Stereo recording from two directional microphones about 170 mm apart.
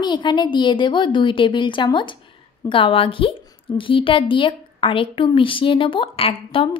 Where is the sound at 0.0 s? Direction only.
25° left (ahead or behind).